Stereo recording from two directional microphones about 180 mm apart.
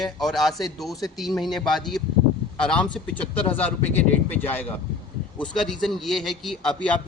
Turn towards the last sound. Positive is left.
turn(degrees=5)  # may be behind; listen again after turning